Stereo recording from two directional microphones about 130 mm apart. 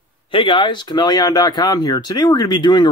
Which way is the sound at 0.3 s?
40° left (ahead or behind).